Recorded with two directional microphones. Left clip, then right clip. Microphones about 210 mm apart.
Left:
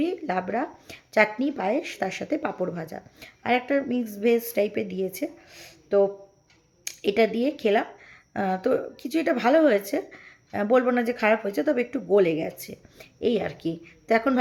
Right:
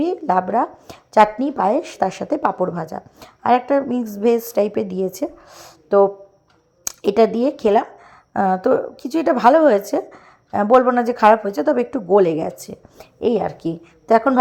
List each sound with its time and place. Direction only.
0.0 s a woman's voice: 15° right (ahead or behind)